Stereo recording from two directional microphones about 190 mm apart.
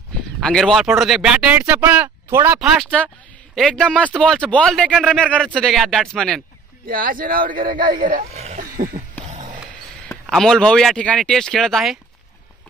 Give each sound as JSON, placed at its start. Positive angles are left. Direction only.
{"t": 0.4, "sound": "speech", "side_deg": 0}
{"t": 6.9, "sound": "speech", "side_deg": -50}
{"t": 8.3, "sound": "a sound", "side_deg": -35}
{"t": 10.0, "sound": "speech", "side_deg": 0}